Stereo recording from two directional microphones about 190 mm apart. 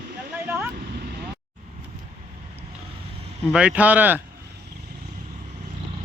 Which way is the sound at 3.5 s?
5° right (ahead or behind).